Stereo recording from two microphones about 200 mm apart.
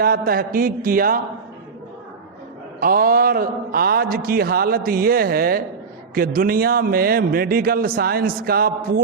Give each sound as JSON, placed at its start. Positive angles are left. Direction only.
{"t": 0.0, "sound": "a man's voice", "side_deg": -45}
{"t": 2.8, "sound": "a man's voice", "side_deg": -45}